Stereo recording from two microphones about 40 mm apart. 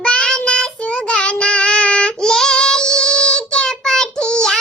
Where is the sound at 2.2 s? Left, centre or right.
Centre.